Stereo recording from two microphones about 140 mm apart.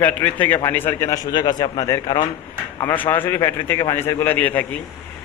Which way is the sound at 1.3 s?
30° left (ahead or behind).